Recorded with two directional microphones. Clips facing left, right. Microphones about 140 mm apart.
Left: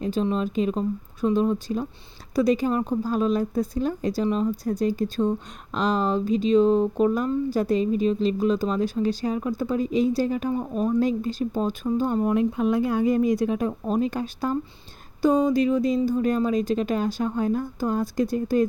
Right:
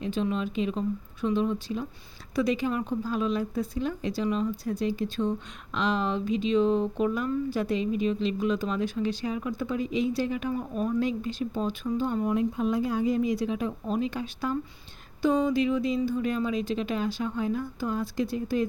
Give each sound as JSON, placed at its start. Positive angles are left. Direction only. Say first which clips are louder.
{"t": 0.0, "sound": "speech", "louder": "left 4 dB", "side_deg": 40}
{"t": 12.3, "sound": "speech", "louder": "left 4 dB", "side_deg": 65}